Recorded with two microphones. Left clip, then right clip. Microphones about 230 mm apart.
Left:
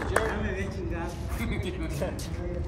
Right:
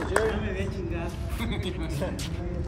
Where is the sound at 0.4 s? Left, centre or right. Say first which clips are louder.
Right 1 dB; centre.